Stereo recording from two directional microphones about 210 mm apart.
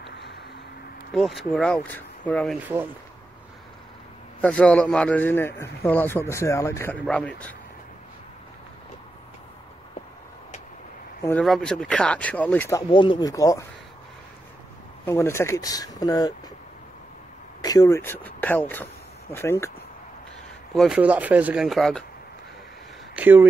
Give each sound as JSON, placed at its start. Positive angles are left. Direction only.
{"t": 1.1, "sound": "speech", "side_deg": 0}
{"t": 2.6, "sound": "speech", "side_deg": -10}
{"t": 4.4, "sound": "a man's voice", "side_deg": 5}
{"t": 11.2, "sound": "a man's voice", "side_deg": 5}
{"t": 12.9, "sound": "a man's voice", "side_deg": 25}
{"t": 15.0, "sound": "a man's voice", "side_deg": 10}
{"t": 17.6, "sound": "a man's voice", "side_deg": 15}
{"t": 20.7, "sound": "speech", "side_deg": 0}
{"t": 23.1, "sound": "speech", "side_deg": -10}